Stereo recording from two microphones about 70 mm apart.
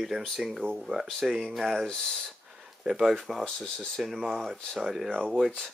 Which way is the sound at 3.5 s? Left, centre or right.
Centre.